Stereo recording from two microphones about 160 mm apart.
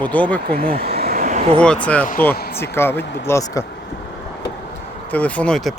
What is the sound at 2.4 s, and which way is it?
Speech, 75° left (ahead or behind).